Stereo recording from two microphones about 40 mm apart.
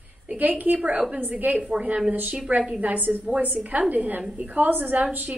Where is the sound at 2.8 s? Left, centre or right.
Right.